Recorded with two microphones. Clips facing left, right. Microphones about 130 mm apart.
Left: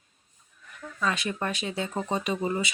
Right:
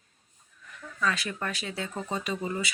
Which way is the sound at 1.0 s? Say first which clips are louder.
Left 1 dB; 20° left (ahead or behind).